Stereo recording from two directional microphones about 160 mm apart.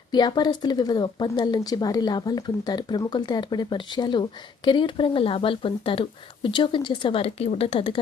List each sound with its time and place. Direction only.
0.1 s speech: 25° left (ahead or behind)